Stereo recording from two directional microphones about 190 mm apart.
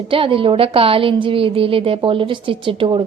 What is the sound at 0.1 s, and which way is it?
A woman's voice, 30° right (ahead or behind).